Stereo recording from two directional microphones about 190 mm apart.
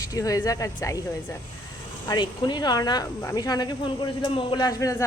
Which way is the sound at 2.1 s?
25° left (ahead or behind).